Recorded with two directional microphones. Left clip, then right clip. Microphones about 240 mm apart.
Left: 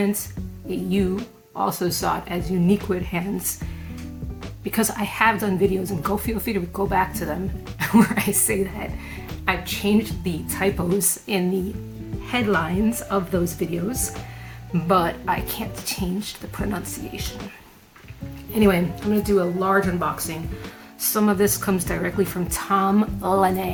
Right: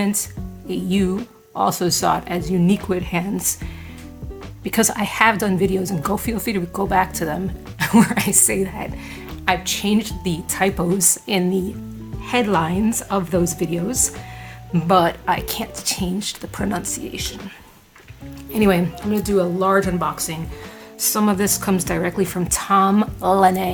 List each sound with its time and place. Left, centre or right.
0.7 s a woman's voice: right
4.6 s a woman's voice: right
18.5 s a woman's voice: right